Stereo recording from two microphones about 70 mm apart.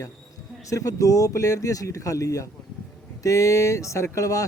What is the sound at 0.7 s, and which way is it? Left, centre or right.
Speech, left.